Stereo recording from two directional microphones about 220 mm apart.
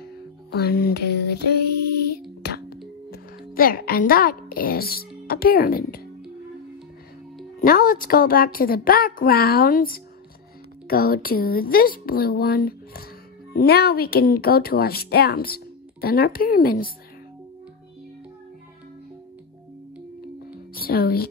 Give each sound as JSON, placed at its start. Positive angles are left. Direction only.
{"t": 0.5, "sound": "a sound", "side_deg": 45}
{"t": 2.4, "sound": "music", "side_deg": 45}
{"t": 3.1, "sound": "a woman's voice", "side_deg": 40}
{"t": 7.6, "sound": "a woman's voice", "side_deg": 40}
{"t": 10.9, "sound": "speech", "side_deg": 40}
{"t": 20.7, "sound": "speech", "side_deg": 45}